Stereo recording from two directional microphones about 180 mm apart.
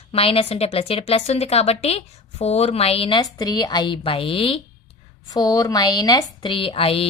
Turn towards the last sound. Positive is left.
turn(degrees=30)  # may be behind; listen again after turning